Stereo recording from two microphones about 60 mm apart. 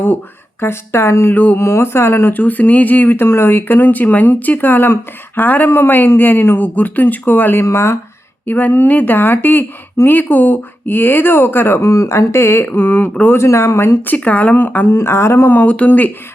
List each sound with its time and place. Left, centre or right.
0.6 s speech: left
1.3 s speech: left
1.5 s speech: left
2.4 s speech: left
7.6 s speech: left
8.4 s speech: left
12.6 s speech: left
13.3 s speech: left
14.9 s speech: left
15.6 s speech: left